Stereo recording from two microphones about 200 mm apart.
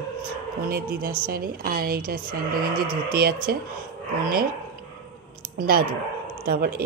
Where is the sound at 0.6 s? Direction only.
50° right (ahead or behind).